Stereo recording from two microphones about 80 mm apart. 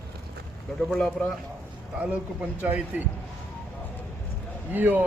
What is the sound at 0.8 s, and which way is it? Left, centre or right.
Speech, centre.